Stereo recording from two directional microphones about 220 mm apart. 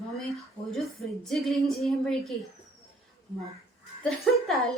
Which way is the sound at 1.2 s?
Centre (ahead or behind).